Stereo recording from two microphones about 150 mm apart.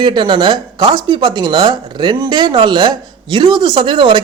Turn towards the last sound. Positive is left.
turn(degrees=-30)  # may be behind; listen again after turning